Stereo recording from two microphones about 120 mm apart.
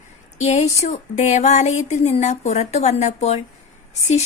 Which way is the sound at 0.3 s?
70° left (ahead or behind).